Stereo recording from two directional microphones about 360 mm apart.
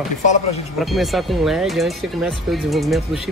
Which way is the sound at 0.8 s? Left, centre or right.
Centre.